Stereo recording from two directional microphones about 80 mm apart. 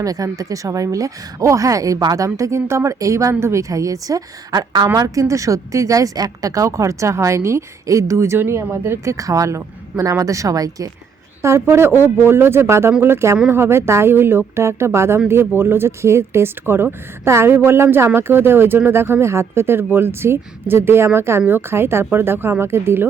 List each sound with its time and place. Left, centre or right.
0.0 s a woman's voice: right
9.1 s a woman's voice: right
11.4 s speech: right